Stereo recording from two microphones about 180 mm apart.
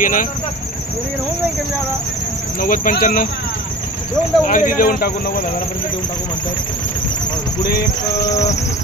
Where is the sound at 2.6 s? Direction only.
50° left (ahead or behind).